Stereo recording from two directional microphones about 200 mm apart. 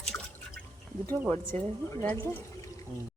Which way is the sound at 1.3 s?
10° left (ahead or behind).